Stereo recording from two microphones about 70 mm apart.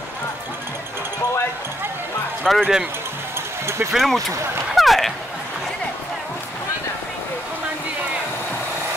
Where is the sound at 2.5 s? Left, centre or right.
Centre.